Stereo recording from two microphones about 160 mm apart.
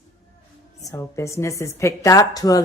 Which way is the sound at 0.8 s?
20° left (ahead or behind).